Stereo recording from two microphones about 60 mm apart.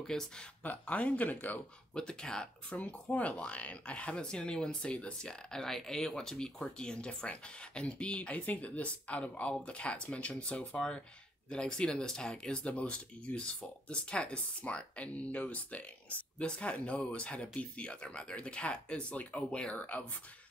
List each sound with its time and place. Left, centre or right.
0.0 s speech: centre
0.7 s speech: left
2.0 s speech: centre